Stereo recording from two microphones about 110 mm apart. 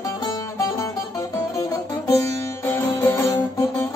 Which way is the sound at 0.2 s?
30° left (ahead or behind).